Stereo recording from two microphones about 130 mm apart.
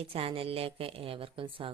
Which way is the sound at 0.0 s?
50° right (ahead or behind).